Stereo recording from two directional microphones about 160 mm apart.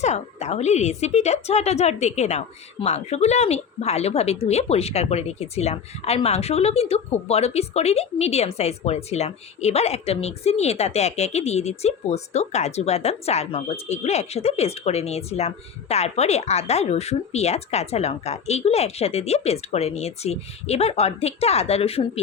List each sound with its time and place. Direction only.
0.0 s a woman's voice: 45° left (ahead or behind)